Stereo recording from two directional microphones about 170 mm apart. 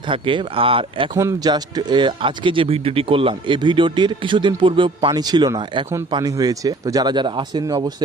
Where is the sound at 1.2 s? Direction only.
20° right (ahead or behind).